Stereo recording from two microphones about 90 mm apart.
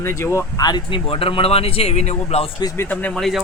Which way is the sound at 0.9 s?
90° left.